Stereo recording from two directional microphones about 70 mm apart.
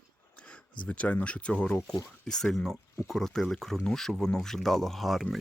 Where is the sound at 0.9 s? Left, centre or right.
Centre.